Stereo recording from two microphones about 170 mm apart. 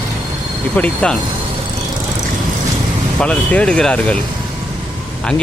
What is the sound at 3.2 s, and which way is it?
Speech, 5° left (ahead or behind).